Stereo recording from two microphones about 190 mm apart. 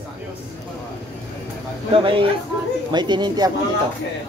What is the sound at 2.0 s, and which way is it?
Speech, 30° right (ahead or behind).